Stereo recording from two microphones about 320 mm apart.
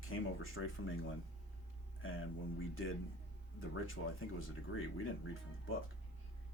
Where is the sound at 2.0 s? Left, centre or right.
Left.